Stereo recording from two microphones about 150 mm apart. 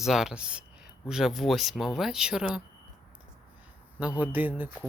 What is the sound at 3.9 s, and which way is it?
Speech, 10° right (ahead or behind).